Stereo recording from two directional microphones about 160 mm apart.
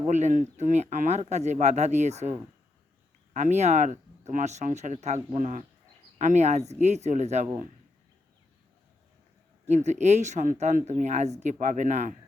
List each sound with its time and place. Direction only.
0.1 s speech: 50° right (ahead or behind)
3.3 s speech: 45° right (ahead or behind)
9.6 s speech: 45° right (ahead or behind)